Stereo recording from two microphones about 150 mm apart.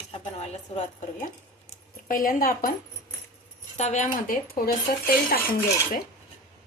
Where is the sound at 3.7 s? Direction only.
50° left (ahead or behind); by 5.4 s 85° left.